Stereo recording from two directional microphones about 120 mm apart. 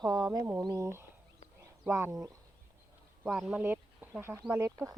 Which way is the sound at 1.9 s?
25° right (ahead or behind).